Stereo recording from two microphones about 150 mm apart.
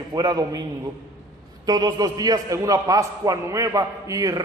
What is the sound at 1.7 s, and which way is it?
A man's voice, 30° right (ahead or behind).